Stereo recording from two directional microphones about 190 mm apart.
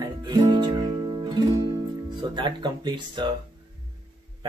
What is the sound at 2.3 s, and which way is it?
Speech, 25° right (ahead or behind).